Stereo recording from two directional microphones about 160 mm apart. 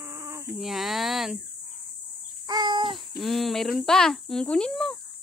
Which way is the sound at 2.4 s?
25° right (ahead or behind).